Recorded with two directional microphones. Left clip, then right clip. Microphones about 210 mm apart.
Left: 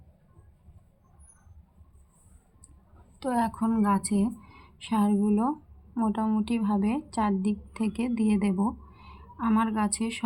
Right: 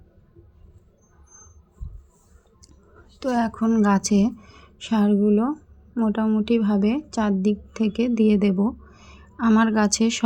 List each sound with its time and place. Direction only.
3.2 s a woman's voice: 15° right (ahead or behind)
3.8 s a woman's voice: 25° right (ahead or behind)